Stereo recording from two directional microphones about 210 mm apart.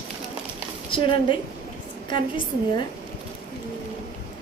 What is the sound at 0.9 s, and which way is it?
A woman's voice, 25° left (ahead or behind).